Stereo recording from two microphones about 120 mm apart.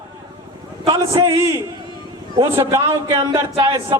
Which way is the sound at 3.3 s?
45° right (ahead or behind).